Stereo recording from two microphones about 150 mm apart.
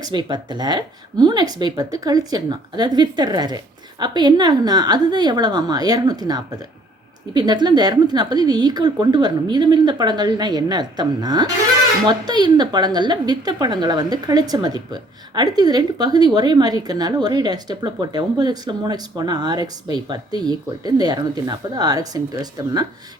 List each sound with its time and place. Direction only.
0.0 s a woman's voice: 30° right (ahead or behind)